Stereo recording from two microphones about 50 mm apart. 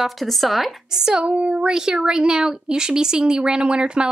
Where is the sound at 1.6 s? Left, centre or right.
Centre.